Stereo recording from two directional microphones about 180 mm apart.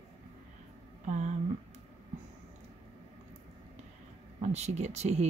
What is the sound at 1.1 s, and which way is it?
Speech, 40° right (ahead or behind).